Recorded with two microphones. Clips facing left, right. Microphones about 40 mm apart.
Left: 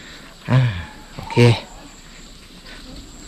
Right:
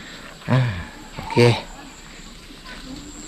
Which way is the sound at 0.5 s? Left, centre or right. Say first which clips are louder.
Left 2 dB; left.